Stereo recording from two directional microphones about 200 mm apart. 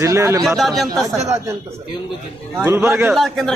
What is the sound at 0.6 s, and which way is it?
Speech, centre (ahead or behind).